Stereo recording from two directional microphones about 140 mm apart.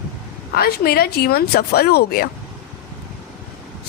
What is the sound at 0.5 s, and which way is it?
Speech, 90° left.